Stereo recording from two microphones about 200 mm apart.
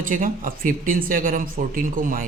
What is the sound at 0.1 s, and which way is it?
Speech, 45° right (ahead or behind).